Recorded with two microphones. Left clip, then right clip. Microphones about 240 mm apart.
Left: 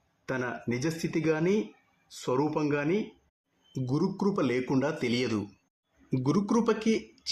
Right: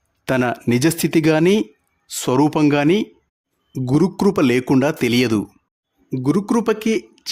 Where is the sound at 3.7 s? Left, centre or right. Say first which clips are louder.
Right 12 dB; right.